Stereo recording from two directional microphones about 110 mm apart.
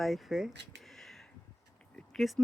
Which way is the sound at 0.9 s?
Centre (ahead or behind).